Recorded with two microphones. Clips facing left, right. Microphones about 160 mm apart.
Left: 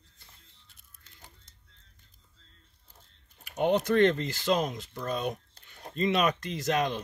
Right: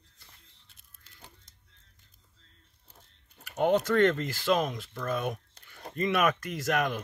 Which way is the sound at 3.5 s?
20° left (ahead or behind).